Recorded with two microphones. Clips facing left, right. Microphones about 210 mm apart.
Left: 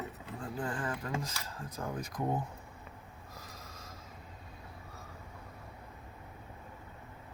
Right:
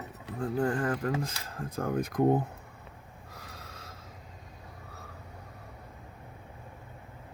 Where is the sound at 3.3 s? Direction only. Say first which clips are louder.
Right 3 dB; 65° right (ahead or behind).